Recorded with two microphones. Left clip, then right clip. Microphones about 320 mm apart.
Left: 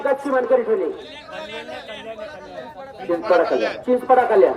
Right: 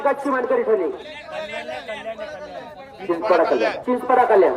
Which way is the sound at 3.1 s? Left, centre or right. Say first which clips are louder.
Even; centre.